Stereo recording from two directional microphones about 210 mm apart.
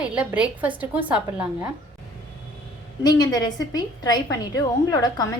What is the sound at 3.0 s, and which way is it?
A woman's voice, 20° left (ahead or behind).